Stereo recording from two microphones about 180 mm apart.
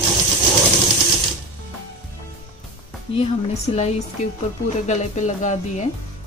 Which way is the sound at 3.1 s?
40° left (ahead or behind).